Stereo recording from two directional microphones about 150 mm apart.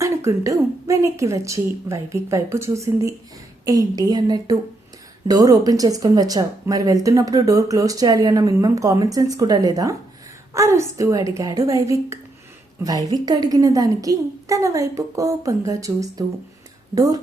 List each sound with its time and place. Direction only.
0.0 s a woman's voice: 20° right (ahead or behind)